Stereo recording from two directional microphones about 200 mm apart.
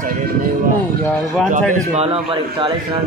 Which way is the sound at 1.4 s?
35° right (ahead or behind).